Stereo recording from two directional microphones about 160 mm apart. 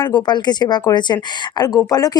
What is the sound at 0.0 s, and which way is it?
A woman's voice, 25° left (ahead or behind).